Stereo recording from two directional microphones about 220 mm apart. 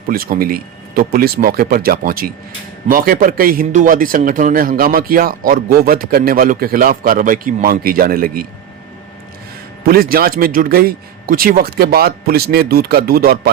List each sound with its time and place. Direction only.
0.1 s a man's voice: 40° right (ahead or behind)
9.8 s speech: 40° right (ahead or behind)